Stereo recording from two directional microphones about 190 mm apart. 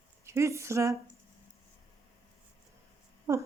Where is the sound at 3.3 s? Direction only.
15° right (ahead or behind).